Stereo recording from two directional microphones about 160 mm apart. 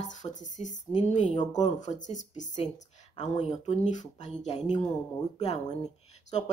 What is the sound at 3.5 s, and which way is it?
Speech, 50° left (ahead or behind).